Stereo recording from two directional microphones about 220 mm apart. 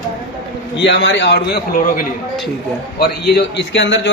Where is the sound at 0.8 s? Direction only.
55° left (ahead or behind).